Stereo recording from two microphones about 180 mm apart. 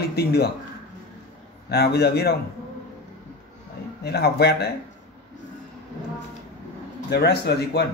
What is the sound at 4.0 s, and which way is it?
Speech, 65° left (ahead or behind).